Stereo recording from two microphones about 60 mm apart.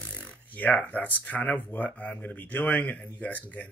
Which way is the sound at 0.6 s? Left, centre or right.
Left.